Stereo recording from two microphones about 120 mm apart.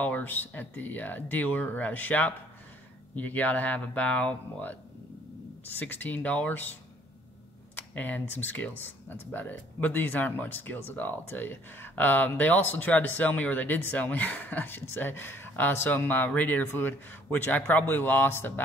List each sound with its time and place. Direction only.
0.0 s speech: 15° left (ahead or behind)
5.8 s speech: 15° left (ahead or behind)
7.7 s speech: 15° left (ahead or behind)